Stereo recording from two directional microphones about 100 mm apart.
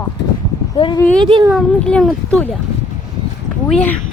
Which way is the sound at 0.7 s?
55° left (ahead or behind).